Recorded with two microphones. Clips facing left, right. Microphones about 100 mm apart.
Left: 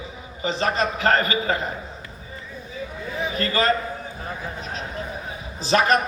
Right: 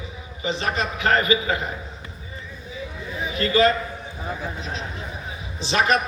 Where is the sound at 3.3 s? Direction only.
40° left (ahead or behind).